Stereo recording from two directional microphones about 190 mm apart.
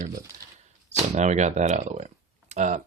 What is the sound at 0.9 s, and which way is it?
Speech, 35° right (ahead or behind).